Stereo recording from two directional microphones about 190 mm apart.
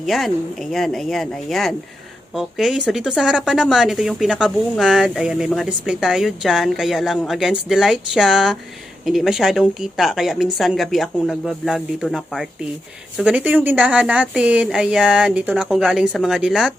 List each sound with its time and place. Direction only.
0.0 s speech: centre (ahead or behind)